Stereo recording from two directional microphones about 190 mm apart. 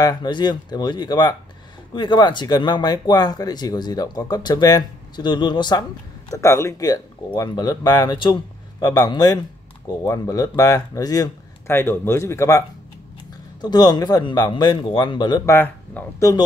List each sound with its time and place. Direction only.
0.0 s speech: 20° left (ahead or behind)